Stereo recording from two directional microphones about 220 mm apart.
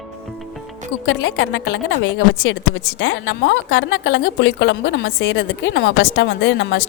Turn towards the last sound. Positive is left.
turn(degrees=55)  # may be behind; listen again after turning